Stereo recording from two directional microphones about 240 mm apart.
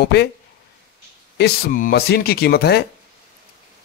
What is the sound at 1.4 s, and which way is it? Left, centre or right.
Speech, left.